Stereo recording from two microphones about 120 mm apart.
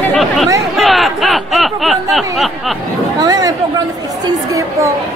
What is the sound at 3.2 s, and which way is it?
A woman's voice, 30° right (ahead or behind).